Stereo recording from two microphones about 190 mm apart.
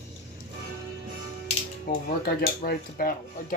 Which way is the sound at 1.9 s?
50° left (ahead or behind).